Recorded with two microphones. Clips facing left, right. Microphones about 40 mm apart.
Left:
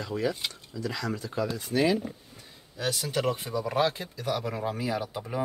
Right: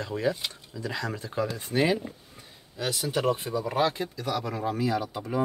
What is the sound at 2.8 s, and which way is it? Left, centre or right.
Speech, centre.